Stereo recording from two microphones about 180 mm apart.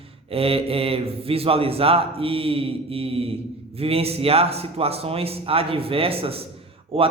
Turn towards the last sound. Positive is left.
turn(degrees=-30)  # may be behind; listen again after turning